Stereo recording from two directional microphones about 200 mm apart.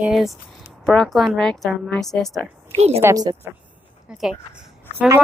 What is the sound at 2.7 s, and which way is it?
Speech, 30° right (ahead or behind).